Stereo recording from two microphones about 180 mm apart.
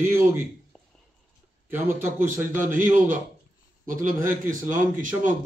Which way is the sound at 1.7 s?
10° right (ahead or behind).